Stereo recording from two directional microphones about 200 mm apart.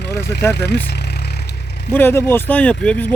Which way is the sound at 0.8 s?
55° left (ahead or behind).